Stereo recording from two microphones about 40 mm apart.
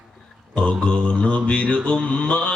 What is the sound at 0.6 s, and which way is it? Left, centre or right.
Mantra, left.